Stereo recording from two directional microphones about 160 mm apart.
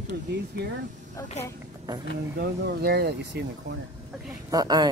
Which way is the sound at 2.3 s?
75° right (ahead or behind).